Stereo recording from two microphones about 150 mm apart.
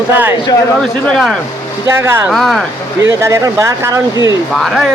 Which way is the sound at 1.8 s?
15° right (ahead or behind).